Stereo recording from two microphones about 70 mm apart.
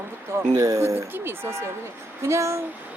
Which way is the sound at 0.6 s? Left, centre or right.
Right.